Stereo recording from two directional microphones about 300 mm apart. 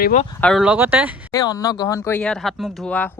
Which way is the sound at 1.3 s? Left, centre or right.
Centre.